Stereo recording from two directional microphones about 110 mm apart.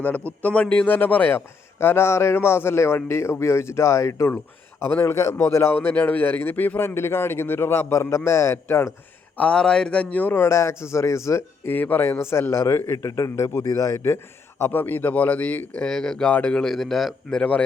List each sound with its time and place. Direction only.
0.3 s a man's voice: 10° left (ahead or behind)
9.4 s a man's voice: 5° left (ahead or behind)